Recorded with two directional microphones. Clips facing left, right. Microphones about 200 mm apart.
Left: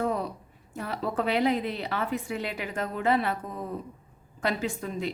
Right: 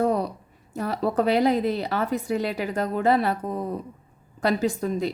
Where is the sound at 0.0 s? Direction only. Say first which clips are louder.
Right 6 dB; 40° right (ahead or behind).